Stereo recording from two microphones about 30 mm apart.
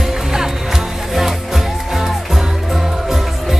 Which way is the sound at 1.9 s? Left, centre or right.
Centre.